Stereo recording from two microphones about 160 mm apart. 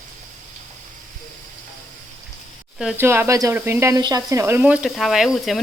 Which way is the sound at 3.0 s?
15° right (ahead or behind).